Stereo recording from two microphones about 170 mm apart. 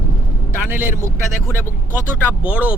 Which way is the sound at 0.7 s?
10° right (ahead or behind).